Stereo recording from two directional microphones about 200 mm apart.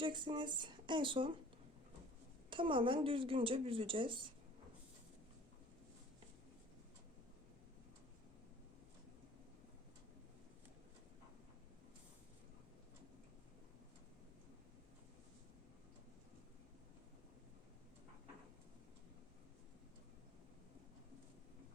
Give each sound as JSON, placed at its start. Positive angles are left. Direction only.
{"t": 0.0, "sound": "a woman's voice", "side_deg": -25}
{"t": 2.5, "sound": "a woman's voice", "side_deg": -25}